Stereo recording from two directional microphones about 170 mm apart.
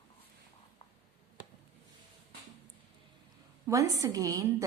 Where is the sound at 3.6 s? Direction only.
20° right (ahead or behind).